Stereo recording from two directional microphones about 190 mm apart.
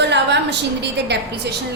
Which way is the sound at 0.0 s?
65° right (ahead or behind).